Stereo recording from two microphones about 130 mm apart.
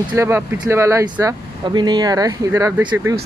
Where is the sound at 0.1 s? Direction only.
20° right (ahead or behind).